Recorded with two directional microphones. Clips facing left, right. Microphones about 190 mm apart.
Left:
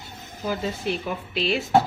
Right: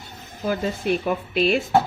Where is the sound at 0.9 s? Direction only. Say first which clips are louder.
Right 5 dB; 55° right (ahead or behind).